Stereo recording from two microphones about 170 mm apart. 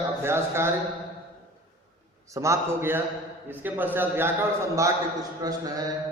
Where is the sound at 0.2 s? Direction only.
15° right (ahead or behind).